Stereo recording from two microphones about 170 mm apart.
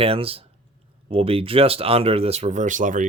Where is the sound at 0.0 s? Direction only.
35° right (ahead or behind).